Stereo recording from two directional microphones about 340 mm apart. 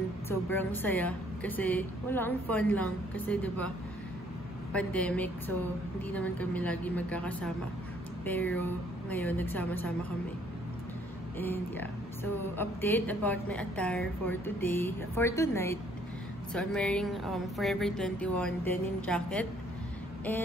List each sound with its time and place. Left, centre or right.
0.3 s a woman's voice: centre
4.7 s a woman's voice: centre
11.3 s a woman's voice: centre